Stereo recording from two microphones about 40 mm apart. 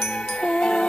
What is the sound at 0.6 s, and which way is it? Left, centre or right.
Music, centre.